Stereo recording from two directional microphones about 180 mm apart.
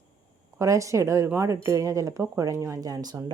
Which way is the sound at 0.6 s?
15° right (ahead or behind).